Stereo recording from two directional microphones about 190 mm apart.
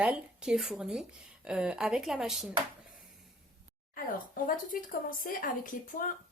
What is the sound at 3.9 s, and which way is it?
Speech, 45° left (ahead or behind).